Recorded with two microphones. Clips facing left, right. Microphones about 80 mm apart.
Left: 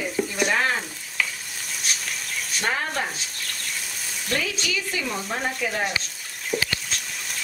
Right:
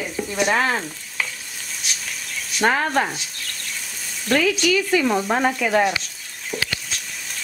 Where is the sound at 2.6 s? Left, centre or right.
Right.